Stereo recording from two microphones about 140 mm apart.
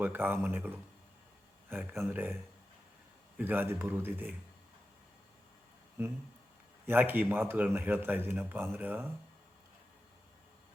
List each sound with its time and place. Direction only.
0.0 s speech: 15° right (ahead or behind)
6.0 s speech: 20° right (ahead or behind)